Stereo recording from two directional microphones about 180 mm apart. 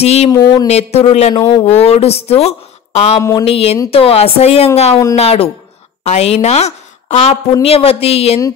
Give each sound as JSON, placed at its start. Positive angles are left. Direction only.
{"t": 0.0, "sound": "speech", "side_deg": 35}
{"t": 0.3, "sound": "speech", "side_deg": 20}
{"t": 0.7, "sound": "speech", "side_deg": 35}
{"t": 3.2, "sound": "speech", "side_deg": 20}
{"t": 3.4, "sound": "a woman's voice", "side_deg": 35}